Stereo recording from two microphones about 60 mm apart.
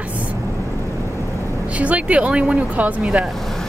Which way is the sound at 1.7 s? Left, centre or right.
Right.